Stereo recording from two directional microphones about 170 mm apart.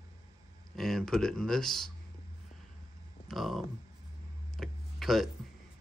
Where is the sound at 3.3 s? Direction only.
Centre (ahead or behind).